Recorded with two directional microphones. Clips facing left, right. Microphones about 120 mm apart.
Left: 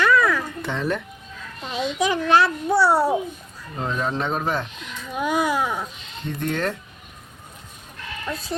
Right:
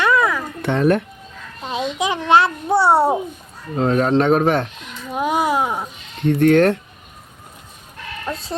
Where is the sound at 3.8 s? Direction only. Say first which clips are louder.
Right 9 dB; 65° right (ahead or behind).